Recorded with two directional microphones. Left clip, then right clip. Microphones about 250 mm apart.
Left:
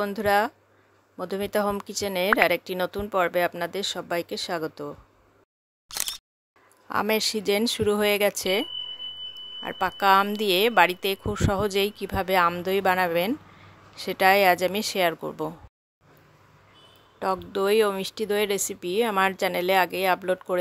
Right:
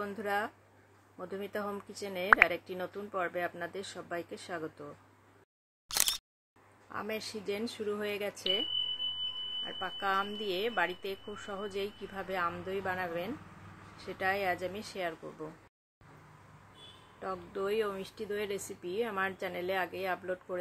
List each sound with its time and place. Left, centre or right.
0.0 s speech: left
5.9 s a sound: centre
6.9 s speech: left
9.7 s speech: left
17.2 s speech: left